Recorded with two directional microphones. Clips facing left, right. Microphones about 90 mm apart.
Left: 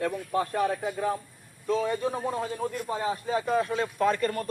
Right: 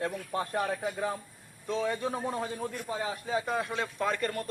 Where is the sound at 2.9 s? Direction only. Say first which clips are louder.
Left 4 dB; 40° left (ahead or behind).